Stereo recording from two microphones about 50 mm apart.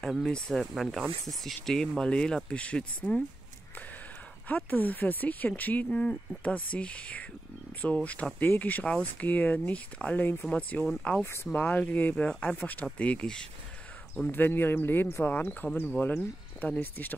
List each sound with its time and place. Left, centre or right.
0.2 s speech: centre
1.4 s speech: centre
4.5 s speech: left; by 13.5 s centre
14.3 s speech: left